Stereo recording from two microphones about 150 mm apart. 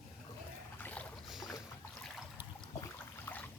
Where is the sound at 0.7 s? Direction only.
10° left (ahead or behind).